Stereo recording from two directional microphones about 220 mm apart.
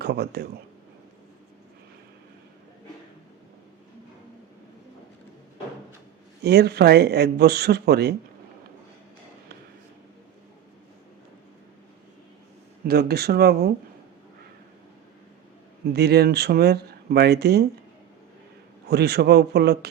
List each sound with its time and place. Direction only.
0.0 s speech: 45° right (ahead or behind)
6.4 s speech: 50° right (ahead or behind)
12.8 s speech: 45° right (ahead or behind)
15.9 s speech: 45° right (ahead or behind)
18.9 s speech: 50° right (ahead or behind)